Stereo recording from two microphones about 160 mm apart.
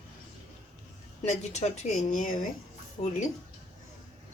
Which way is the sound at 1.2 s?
45° left (ahead or behind).